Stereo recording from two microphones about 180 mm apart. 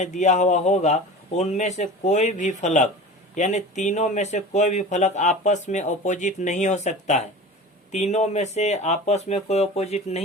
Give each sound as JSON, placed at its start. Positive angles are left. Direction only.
{"t": 0.0, "sound": "speech", "side_deg": 40}